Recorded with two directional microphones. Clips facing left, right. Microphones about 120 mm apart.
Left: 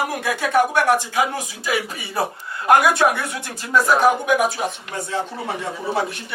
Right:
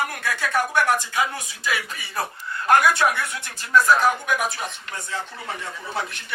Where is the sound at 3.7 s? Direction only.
15° left (ahead or behind).